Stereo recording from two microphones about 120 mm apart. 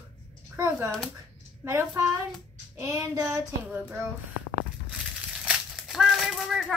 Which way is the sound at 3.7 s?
15° right (ahead or behind).